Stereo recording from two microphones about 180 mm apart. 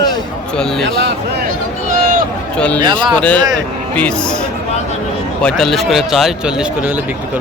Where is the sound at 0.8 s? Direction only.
75° right (ahead or behind).